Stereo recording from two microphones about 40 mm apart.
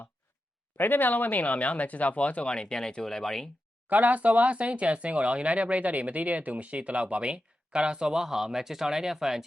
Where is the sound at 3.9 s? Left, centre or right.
Right; by 9.4 s centre.